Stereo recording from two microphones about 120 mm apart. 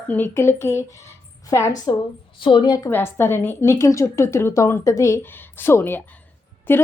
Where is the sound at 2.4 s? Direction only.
45° left (ahead or behind).